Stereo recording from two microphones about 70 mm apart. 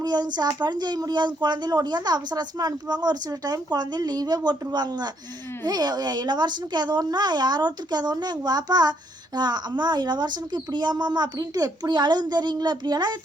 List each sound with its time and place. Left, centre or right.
0.0 s speech: right
4.7 s speech: right
5.6 s speech: right